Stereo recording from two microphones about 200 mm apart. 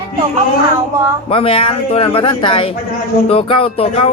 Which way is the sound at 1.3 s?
30° left (ahead or behind).